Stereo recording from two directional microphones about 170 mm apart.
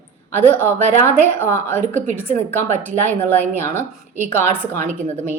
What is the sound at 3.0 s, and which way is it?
Speech, 10° left (ahead or behind).